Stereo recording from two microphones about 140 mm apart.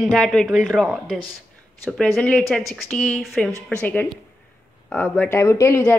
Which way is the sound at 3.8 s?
15° left (ahead or behind).